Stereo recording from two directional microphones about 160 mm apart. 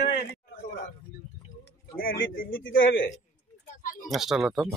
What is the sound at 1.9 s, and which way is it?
Speech, 65° left (ahead or behind).